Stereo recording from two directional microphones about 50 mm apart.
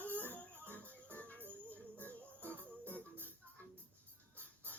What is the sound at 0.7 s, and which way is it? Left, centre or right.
Music, left.